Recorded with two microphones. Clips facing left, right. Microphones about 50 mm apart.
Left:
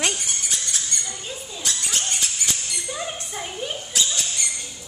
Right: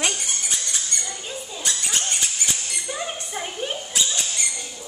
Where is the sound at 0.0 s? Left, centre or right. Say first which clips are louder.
Even; centre.